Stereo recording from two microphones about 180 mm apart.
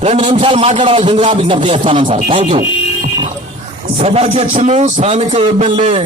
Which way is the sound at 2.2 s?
40° right (ahead or behind).